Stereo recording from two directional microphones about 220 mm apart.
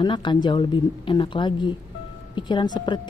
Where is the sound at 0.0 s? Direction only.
20° left (ahead or behind).